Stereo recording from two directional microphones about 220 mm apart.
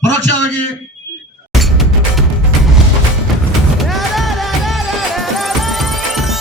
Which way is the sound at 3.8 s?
Centre (ahead or behind).